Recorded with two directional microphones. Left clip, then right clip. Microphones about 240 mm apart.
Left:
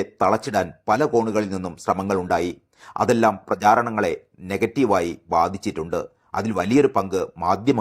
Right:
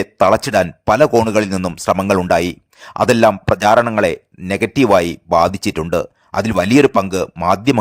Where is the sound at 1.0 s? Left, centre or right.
Right.